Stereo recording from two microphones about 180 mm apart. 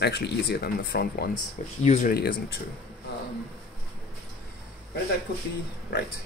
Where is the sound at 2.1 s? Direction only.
55° left (ahead or behind).